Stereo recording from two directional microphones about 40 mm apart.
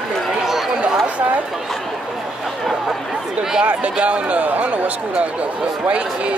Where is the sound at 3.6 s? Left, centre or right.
Right.